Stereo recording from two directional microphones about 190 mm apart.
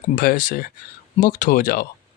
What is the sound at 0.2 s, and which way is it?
Speech, 45° left (ahead or behind).